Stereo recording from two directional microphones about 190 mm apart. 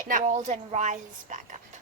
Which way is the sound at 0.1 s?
40° right (ahead or behind).